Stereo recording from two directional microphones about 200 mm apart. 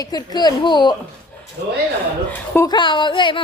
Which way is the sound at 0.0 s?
20° left (ahead or behind).